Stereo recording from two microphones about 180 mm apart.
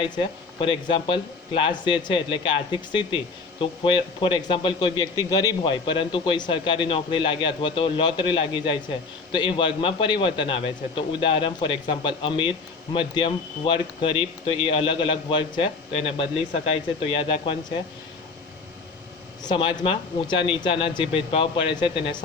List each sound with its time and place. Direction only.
0.0 s a man's voice: 25° left (ahead or behind)
19.4 s a man's voice: 25° left (ahead or behind)